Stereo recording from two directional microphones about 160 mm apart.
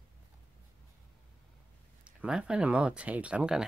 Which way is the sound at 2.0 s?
5° right (ahead or behind).